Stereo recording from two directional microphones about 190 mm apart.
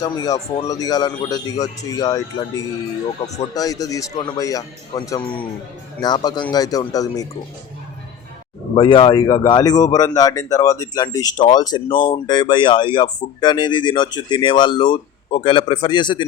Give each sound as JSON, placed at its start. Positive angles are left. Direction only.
{"t": 0.0, "sound": "speech", "side_deg": 20}
{"t": 8.7, "sound": "speech", "side_deg": 25}